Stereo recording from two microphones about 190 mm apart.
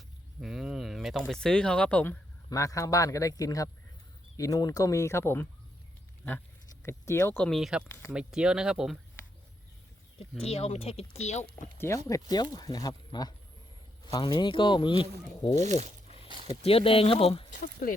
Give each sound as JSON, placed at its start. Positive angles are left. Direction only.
{"t": 0.4, "sound": "speech", "side_deg": 0}
{"t": 2.5, "sound": "a man's voice", "side_deg": 15}
{"t": 6.8, "sound": "speech", "side_deg": 15}
{"t": 10.4, "sound": "speech", "side_deg": 35}
{"t": 11.8, "sound": "speech", "side_deg": 15}
{"t": 15.5, "sound": "speech", "side_deg": -35}
{"t": 16.5, "sound": "speech", "side_deg": 30}